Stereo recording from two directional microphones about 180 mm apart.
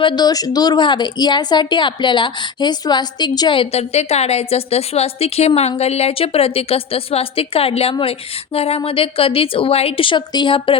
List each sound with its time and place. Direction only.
0.0 s a woman's voice: 25° left (ahead or behind)